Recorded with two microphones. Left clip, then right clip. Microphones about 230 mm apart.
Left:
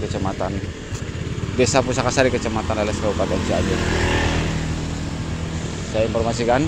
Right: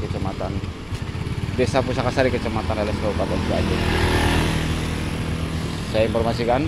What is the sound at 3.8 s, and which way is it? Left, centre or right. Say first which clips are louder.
Vehicle: left 1 dB; centre.